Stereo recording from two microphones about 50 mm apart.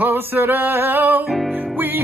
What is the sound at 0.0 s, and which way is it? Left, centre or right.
Music, right.